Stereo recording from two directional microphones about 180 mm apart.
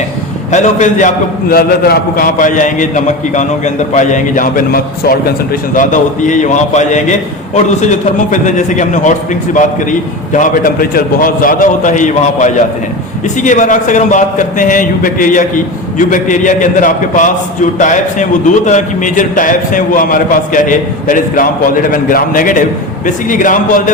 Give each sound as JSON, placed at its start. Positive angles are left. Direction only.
{"t": 0.5, "sound": "a man's voice", "side_deg": 40}